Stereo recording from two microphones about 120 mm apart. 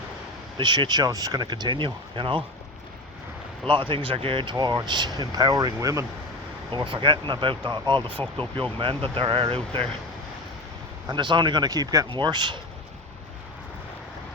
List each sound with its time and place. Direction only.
0.5 s speech: 40° right (ahead or behind)
3.7 s speech: 45° right (ahead or behind); by 6.1 s 30° right (ahead or behind)
6.7 s speech: 45° right (ahead or behind)
11.1 s speech: 40° right (ahead or behind)